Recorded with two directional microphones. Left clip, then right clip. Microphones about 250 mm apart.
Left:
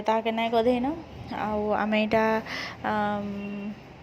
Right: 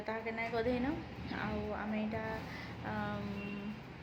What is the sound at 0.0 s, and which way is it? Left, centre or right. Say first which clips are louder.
A woman's voice: left 14 dB; left.